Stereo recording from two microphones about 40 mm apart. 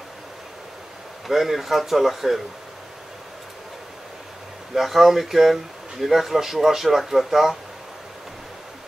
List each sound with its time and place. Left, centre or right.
1.2 s speech: centre
4.7 s speech: centre